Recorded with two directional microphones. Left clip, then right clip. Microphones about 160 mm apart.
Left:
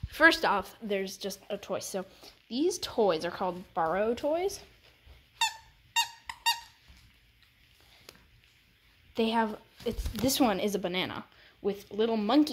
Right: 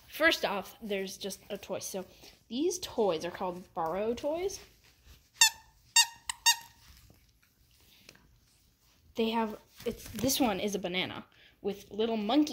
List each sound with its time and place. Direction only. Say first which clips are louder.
0.1 s speech: left 5 dB; 5° left (ahead or behind)
5.9 s squeak: right 3 dB; 5° left (ahead or behind)
8.1 s a sound: left 3 dB; 35° left (ahead or behind)
9.1 s a woman's voice: left 3 dB; centre (ahead or behind)